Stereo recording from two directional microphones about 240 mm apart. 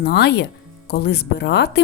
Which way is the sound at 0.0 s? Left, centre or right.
Left.